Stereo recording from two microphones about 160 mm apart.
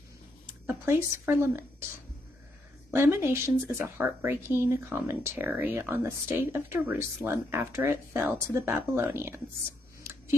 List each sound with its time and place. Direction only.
0.7 s a woman's voice: 15° right (ahead or behind)
2.9 s a woman's voice: 15° right (ahead or behind)
10.1 s a sound: 15° right (ahead or behind)